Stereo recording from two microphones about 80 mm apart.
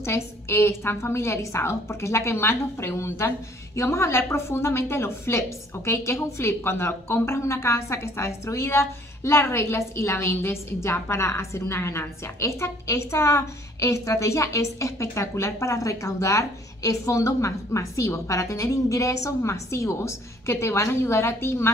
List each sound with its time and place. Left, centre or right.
0.0 s a woman's voice: left